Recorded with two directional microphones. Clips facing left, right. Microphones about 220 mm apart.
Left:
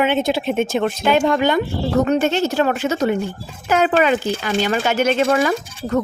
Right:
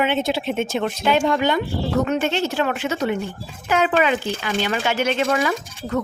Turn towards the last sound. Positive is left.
turn(degrees=45)  # may be behind; listen again after turning